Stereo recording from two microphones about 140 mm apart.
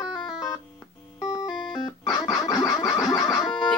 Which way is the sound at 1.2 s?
25° left (ahead or behind).